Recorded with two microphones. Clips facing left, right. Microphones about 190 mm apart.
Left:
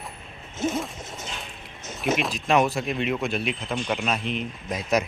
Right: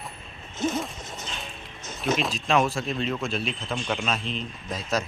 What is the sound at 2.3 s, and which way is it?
Speech, 15° left (ahead or behind).